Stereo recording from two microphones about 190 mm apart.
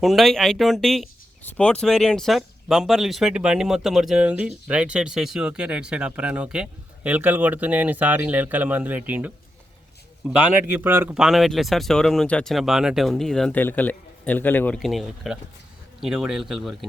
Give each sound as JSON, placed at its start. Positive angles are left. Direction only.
{"t": 0.0, "sound": "speech", "side_deg": 0}